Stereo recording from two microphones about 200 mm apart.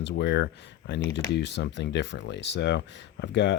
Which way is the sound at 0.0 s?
60° left (ahead or behind).